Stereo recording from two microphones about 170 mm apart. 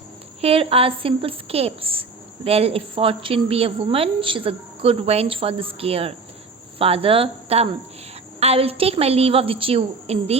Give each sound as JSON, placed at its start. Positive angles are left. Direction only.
{"t": 0.4, "sound": "a woman's voice", "side_deg": -35}